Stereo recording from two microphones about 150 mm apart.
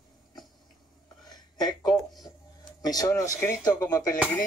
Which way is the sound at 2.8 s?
25° left (ahead or behind).